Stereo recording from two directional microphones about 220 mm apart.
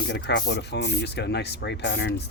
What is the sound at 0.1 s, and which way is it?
Speech, 50° left (ahead or behind).